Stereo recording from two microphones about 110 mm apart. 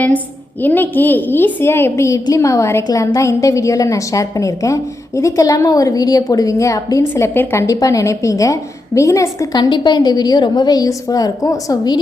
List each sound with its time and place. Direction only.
0.6 s a woman's voice: 15° left (ahead or behind)
9.6 s a woman's voice: 45° left (ahead or behind)